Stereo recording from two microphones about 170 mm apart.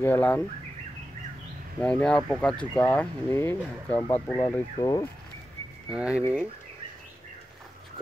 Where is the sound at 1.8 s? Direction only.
5° left (ahead or behind); by 5.0 s 25° left (ahead or behind).